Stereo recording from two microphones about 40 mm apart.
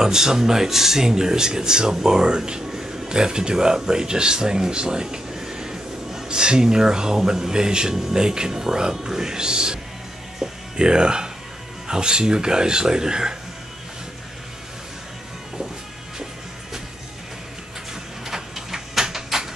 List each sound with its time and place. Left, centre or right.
0.0 s speech: centre
10.4 s music: right
11.9 s speech: right
18.2 s printer: centre